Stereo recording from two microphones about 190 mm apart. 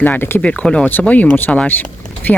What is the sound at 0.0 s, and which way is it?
Speech, 10° left (ahead or behind).